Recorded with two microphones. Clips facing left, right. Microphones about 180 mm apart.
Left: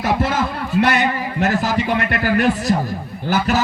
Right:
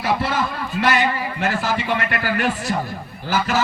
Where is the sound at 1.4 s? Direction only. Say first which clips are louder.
Left 5 dB; 40° left (ahead or behind).